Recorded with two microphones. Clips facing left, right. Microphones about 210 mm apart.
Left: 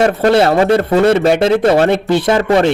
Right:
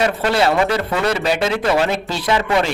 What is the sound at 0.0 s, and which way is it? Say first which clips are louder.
Speech: left 6 dB; 45° left (ahead or behind).